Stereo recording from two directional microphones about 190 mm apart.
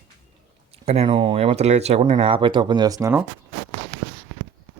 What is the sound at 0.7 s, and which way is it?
Speech, 30° right (ahead or behind).